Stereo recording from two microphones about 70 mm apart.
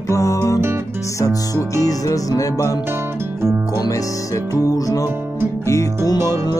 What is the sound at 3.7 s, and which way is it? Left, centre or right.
Music, left.